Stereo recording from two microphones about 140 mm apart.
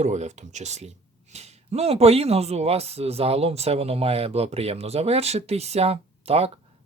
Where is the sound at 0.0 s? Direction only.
55° right (ahead or behind).